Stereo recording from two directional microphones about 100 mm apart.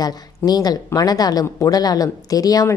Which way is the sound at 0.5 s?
40° left (ahead or behind).